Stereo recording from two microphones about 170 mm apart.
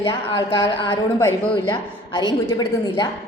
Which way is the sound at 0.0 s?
30° left (ahead or behind).